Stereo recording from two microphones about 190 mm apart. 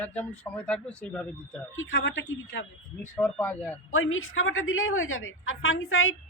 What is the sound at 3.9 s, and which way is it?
A woman's voice, 90° left.